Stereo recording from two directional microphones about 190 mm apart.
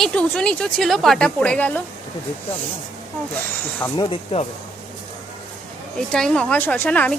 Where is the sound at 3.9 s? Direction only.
30° left (ahead or behind).